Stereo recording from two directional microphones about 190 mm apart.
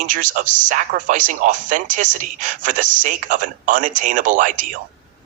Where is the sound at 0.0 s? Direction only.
45° right (ahead or behind).